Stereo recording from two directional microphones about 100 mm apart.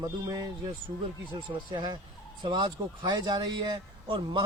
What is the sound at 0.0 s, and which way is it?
Speech, 40° right (ahead or behind).